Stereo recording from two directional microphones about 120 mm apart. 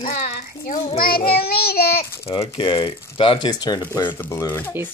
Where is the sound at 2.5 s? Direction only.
45° left (ahead or behind).